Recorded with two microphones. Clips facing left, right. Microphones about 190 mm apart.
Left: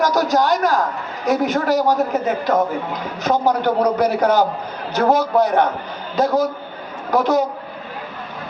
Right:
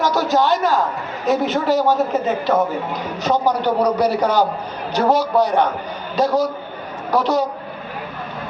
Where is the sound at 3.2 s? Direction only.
15° left (ahead or behind).